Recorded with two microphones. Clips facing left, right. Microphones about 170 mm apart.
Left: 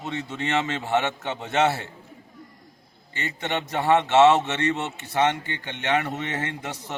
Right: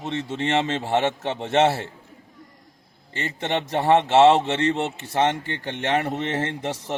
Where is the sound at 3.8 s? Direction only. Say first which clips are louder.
Right 1 dB; 30° right (ahead or behind).